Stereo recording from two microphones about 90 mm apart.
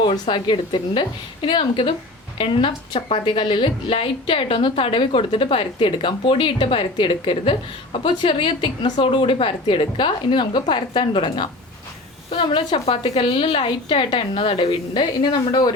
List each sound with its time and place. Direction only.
0.0 s a woman's voice: 60° left (ahead or behind); by 2.0 s 80° left
2.4 s a woman's voice: 65° left (ahead or behind)